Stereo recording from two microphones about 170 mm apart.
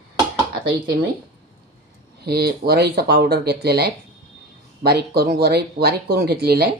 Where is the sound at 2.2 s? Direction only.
70° right (ahead or behind).